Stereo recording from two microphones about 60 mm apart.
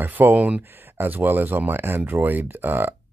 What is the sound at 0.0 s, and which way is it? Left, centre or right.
Speech, right.